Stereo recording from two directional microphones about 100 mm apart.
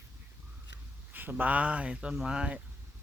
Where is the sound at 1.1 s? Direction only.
20° right (ahead or behind).